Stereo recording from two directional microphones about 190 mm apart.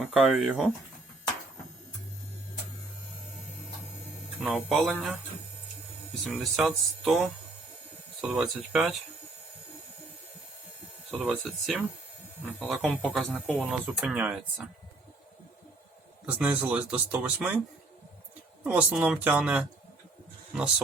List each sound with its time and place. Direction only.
0.0 s speech: centre (ahead or behind)
4.4 s speech: centre (ahead or behind)
6.2 s speech: centre (ahead or behind)
11.2 s speech: 5° right (ahead or behind)
16.2 s speech: 5° right (ahead or behind)
18.6 s speech: 10° right (ahead or behind)